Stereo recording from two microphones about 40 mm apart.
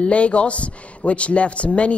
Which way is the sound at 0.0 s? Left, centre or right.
Left.